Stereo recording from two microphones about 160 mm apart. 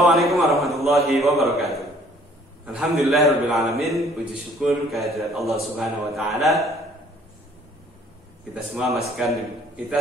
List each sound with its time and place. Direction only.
0.0 s a sound: centre (ahead or behind)
2.6 s a man's voice: 5° right (ahead or behind)
8.7 s a man's voice: centre (ahead or behind)